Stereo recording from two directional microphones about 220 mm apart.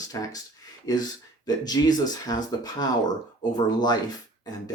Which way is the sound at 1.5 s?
20° left (ahead or behind).